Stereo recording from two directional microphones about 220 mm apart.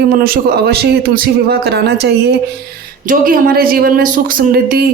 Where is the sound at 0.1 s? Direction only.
45° right (ahead or behind).